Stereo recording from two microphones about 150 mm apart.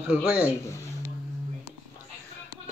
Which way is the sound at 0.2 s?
5° right (ahead or behind).